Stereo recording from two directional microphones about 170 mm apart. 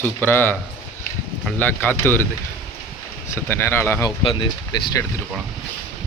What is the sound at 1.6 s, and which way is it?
Speech, 10° left (ahead or behind).